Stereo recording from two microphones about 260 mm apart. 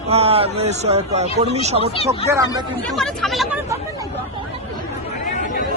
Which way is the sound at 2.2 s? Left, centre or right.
Centre.